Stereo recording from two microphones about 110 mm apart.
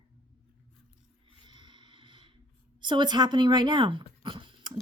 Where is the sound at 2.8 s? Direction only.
45° right (ahead or behind).